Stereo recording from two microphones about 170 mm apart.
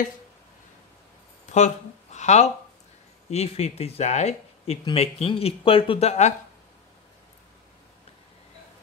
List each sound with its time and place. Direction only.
1.5 s speech: 45° left (ahead or behind)